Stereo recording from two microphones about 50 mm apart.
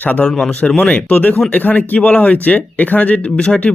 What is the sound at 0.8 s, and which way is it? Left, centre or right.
Speech, left.